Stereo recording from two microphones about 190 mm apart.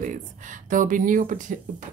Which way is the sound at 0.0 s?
40° right (ahead or behind).